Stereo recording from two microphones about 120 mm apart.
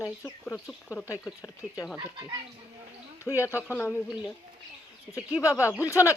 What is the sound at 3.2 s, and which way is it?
Speech, 25° left (ahead or behind).